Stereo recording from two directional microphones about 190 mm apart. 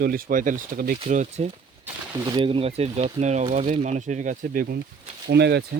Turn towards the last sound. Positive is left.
turn(degrees=-60)  # may be behind; listen again after turning